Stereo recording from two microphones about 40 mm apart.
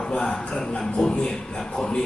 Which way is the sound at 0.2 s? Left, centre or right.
Centre.